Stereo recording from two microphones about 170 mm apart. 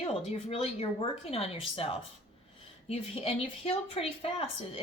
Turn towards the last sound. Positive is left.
turn(degrees=35)  # may be behind; listen again after turning